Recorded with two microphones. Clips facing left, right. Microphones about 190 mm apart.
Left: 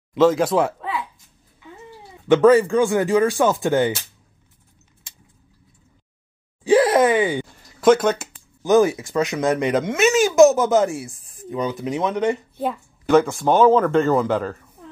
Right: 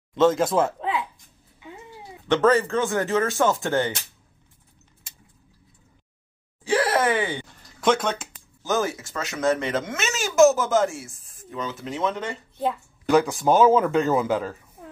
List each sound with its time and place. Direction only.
0.1 s speech: centre (ahead or behind)
0.7 s a sound: 15° right (ahead or behind)
2.2 s speech: 15° left (ahead or behind)
6.6 s a sound: 15° left (ahead or behind)
8.6 s speech: 15° left (ahead or behind)
10.3 s speech: centre (ahead or behind)
10.7 s speech: 15° left (ahead or behind)
13.0 s speech: centre (ahead or behind)